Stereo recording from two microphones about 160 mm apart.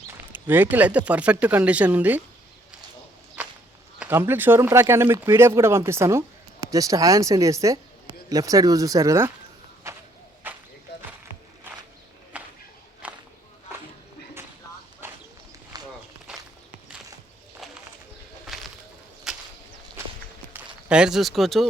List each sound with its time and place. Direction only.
0.1 s speech: 10° right (ahead or behind)
3.9 s speech: 10° right (ahead or behind)
9.9 s a sound: 20° right (ahead or behind)
12.3 s walk: 10° right (ahead or behind)
15.0 s duck: 15° right (ahead or behind)
15.7 s walk: 25° right (ahead or behind)
17.6 s bird: centre (ahead or behind)
18.4 s a sound: centre (ahead or behind)
20.9 s speech: 5° right (ahead or behind)